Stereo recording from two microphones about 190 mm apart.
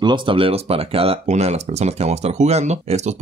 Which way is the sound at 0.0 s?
25° right (ahead or behind).